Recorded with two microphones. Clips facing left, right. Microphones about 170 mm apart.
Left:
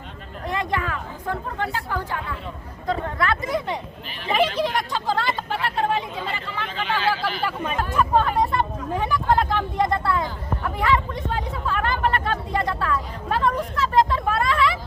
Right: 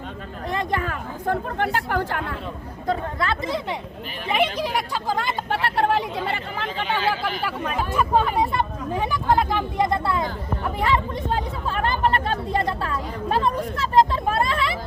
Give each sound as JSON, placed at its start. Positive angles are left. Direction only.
{"t": 0.5, "sound": "speech", "side_deg": -40}
{"t": 1.3, "sound": "speech", "side_deg": -65}
{"t": 3.2, "sound": "speech", "side_deg": -35}
{"t": 4.3, "sound": "speech", "side_deg": -10}
{"t": 5.5, "sound": "speech", "side_deg": -70}
{"t": 6.9, "sound": "speech", "side_deg": -15}
{"t": 7.6, "sound": "speech", "side_deg": -5}
{"t": 10.8, "sound": "speech", "side_deg": -30}